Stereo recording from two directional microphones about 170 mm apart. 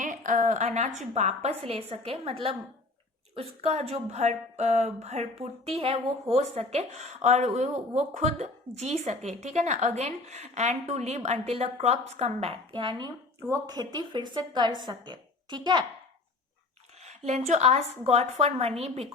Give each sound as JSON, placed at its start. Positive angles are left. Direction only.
{"t": 0.0, "sound": "a woman's voice", "side_deg": -50}
{"t": 17.0, "sound": "speech", "side_deg": -40}